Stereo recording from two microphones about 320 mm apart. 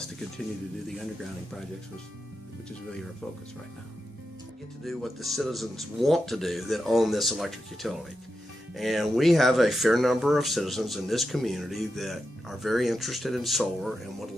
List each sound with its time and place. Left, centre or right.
4.8 s speech: centre